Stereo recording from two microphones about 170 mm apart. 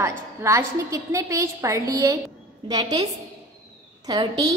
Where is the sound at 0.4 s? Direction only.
15° right (ahead or behind).